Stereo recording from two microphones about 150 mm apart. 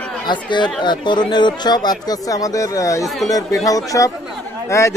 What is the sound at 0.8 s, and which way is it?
Speech, 30° left (ahead or behind).